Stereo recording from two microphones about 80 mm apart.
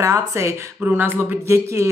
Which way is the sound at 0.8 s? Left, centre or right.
Right.